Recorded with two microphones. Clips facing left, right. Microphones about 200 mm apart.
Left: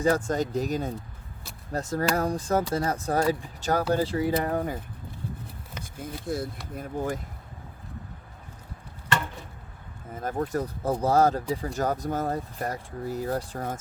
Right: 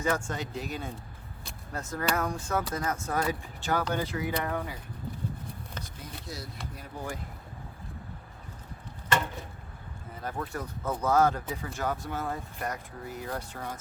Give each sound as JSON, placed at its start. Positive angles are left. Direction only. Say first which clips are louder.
{"t": 0.0, "sound": "speech", "louder": "left 6 dB", "side_deg": 40}
{"t": 4.4, "sound": "speech", "louder": "left 6 dB", "side_deg": 40}
{"t": 5.8, "sound": "speech", "louder": "left 7 dB", "side_deg": 50}
{"t": 10.2, "sound": "speech", "louder": "left 7 dB", "side_deg": 45}